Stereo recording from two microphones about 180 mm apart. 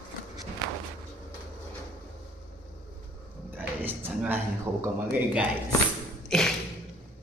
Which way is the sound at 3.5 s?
10° right (ahead or behind).